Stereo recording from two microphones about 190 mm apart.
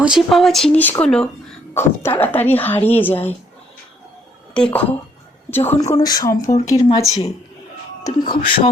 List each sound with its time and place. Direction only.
0.0 s speech: 5° right (ahead or behind)
4.5 s a woman's voice: 5° left (ahead or behind); by 8.7 s 25° left (ahead or behind)